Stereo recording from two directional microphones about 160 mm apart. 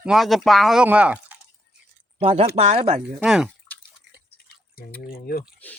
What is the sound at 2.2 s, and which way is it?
Speech, 35° right (ahead or behind).